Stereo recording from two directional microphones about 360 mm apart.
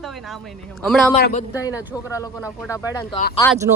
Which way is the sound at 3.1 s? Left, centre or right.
Centre.